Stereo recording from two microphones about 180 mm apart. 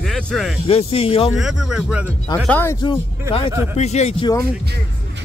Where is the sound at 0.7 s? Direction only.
35° left (ahead or behind).